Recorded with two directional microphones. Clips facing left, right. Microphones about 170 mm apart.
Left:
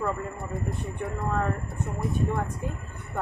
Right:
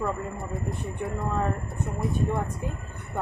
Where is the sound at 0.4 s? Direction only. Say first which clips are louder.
Even; centre (ahead or behind).